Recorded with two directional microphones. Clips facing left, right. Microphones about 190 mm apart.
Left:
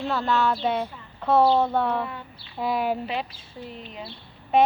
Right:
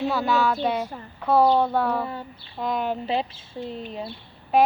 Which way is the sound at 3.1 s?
30° right (ahead or behind).